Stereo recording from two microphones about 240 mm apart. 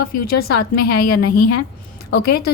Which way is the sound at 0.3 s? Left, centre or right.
Left.